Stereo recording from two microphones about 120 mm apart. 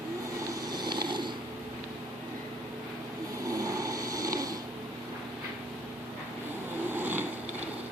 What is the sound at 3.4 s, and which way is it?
Snoring, 30° right (ahead or behind).